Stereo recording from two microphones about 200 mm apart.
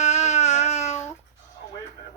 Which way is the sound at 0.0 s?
35° left (ahead or behind).